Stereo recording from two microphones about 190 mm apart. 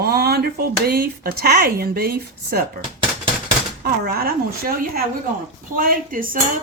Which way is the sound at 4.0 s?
50° right (ahead or behind).